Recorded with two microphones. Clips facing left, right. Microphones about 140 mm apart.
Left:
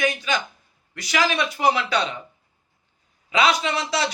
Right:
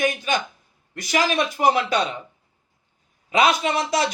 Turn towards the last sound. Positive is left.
turn(degrees=-50)  # may be behind; listen again after turning